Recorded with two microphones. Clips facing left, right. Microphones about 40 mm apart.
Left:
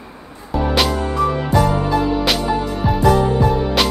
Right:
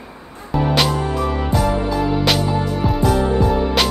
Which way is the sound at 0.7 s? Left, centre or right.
Centre.